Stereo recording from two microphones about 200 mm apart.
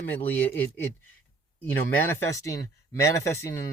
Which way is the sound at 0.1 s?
10° left (ahead or behind).